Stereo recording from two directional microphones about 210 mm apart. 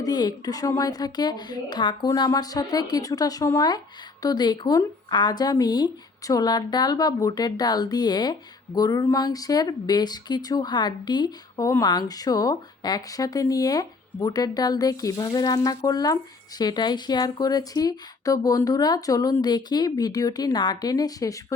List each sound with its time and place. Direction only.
0.0 s speech: 20° left (ahead or behind)